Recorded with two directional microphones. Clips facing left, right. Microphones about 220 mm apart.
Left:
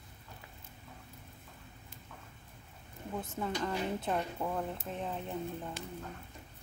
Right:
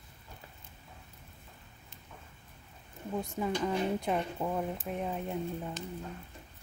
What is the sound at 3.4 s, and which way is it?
Speech, 15° right (ahead or behind).